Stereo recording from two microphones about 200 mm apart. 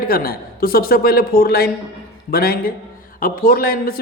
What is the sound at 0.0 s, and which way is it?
Speech, 50° left (ahead or behind).